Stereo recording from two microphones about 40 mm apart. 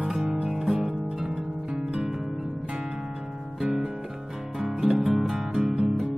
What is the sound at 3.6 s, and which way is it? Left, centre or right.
Music, centre.